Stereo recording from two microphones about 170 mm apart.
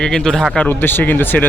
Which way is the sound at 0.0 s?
5° left (ahead or behind).